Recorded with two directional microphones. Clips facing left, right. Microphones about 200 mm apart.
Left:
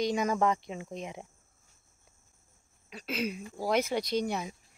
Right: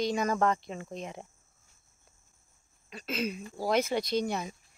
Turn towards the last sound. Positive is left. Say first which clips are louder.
# even
turn(degrees=10)  # may be behind; listen again after turning